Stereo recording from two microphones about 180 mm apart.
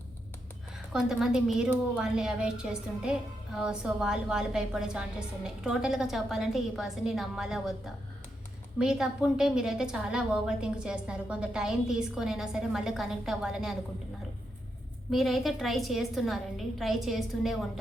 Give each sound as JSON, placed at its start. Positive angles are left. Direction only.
{"t": 0.9, "sound": "a woman's voice", "side_deg": -5}
{"t": 15.1, "sound": "a woman's voice", "side_deg": 0}